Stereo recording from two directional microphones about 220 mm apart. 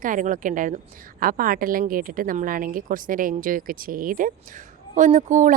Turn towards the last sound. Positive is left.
turn(degrees=-35)  # may be behind; listen again after turning